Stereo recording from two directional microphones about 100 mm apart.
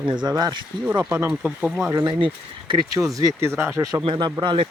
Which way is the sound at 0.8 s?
20° right (ahead or behind).